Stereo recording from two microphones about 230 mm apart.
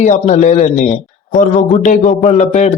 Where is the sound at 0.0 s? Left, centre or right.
Left.